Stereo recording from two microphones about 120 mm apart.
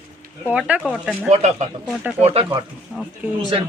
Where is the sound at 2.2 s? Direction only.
55° right (ahead or behind).